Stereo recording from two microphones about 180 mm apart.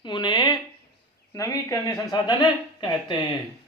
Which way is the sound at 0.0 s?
25° left (ahead or behind).